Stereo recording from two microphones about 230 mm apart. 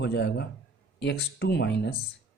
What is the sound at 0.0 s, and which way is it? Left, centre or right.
Speech, left.